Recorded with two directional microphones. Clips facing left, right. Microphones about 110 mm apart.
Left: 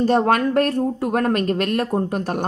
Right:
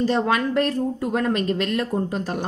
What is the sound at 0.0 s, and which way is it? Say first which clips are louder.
Speech: left 4 dB; 55° left (ahead or behind).